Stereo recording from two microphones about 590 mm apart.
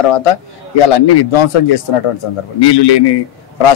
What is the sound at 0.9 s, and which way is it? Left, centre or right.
A man's voice, left.